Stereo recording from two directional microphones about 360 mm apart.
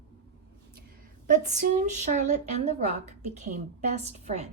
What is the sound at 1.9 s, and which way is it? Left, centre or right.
A woman's voice, centre.